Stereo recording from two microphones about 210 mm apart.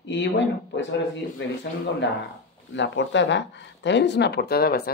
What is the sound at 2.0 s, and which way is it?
Speech, 55° left (ahead or behind).